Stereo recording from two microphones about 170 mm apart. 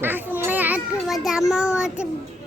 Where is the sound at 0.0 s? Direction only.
10° right (ahead or behind).